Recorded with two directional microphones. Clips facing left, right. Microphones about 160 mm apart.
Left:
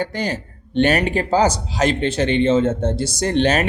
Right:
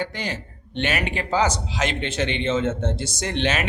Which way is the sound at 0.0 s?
40° left (ahead or behind).